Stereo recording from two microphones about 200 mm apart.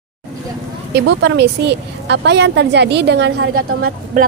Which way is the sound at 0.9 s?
55° right (ahead or behind).